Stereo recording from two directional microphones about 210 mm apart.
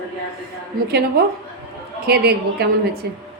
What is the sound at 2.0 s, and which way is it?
Speech, 50° right (ahead or behind).